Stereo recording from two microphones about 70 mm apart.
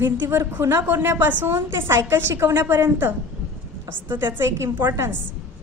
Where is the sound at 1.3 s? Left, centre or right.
Right.